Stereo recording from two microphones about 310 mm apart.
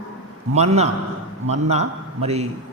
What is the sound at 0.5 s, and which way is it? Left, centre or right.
A man's voice, right.